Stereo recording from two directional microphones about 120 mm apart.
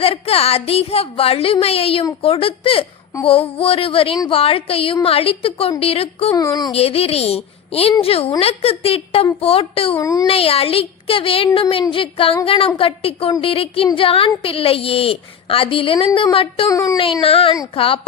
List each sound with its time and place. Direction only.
0.0 s a woman's voice: 55° left (ahead or behind)
6.3 s speech: 30° left (ahead or behind)
6.7 s a woman's voice: 55° left (ahead or behind)
10.0 s speech: 30° left (ahead or behind)
10.2 s a woman's voice: 55° left (ahead or behind)
16.6 s speech: 25° left (ahead or behind)
17.0 s a woman's voice: 50° left (ahead or behind)